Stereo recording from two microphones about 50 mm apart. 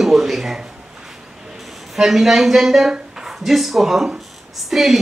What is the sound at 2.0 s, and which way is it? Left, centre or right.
A woman's voice, centre.